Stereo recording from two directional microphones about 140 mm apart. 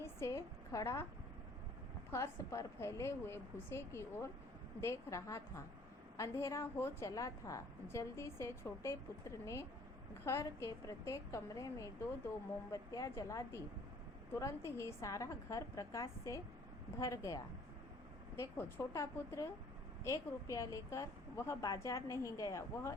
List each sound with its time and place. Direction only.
0.0 s a woman's voice: 20° left (ahead or behind)
2.0 s a woman's voice: 20° left (ahead or behind)